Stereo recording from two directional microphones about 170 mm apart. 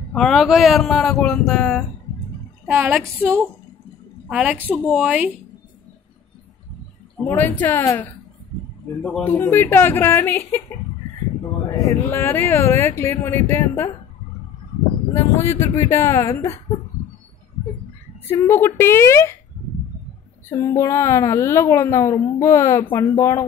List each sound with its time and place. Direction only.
0.1 s a man's voice: centre (ahead or behind)
2.7 s speech: 15° right (ahead or behind)
4.3 s a woman's voice: 5° right (ahead or behind)
7.2 s a woman's voice: 10° left (ahead or behind)
11.7 s a woman's voice: 15° left (ahead or behind)
15.1 s a woman's voice: 15° left (ahead or behind)
18.2 s a woman's voice: 10° left (ahead or behind)
20.5 s a woman's voice: 15° left (ahead or behind)